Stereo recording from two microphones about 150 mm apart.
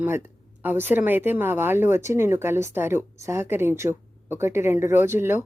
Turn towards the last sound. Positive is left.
turn(degrees=-15)  # may be behind; listen again after turning